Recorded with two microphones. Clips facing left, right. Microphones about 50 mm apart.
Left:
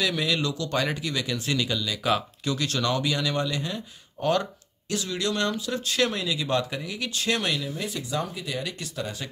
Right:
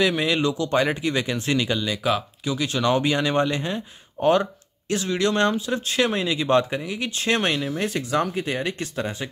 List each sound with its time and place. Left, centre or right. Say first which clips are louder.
0.0 s speech: right 5 dB; right
2.0 s speech: even; centre
2.9 s speech: right 8 dB; right
6.2 s speech: right 6 dB; right
6.8 s speech: right 3 dB; right